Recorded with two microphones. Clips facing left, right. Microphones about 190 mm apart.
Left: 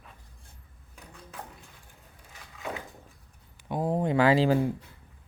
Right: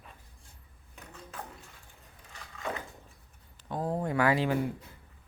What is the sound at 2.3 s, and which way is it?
Crushing, 5° left (ahead or behind).